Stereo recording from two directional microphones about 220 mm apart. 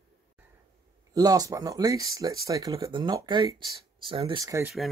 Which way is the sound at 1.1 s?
15° right (ahead or behind).